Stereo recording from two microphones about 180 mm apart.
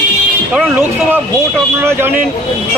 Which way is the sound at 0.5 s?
10° right (ahead or behind).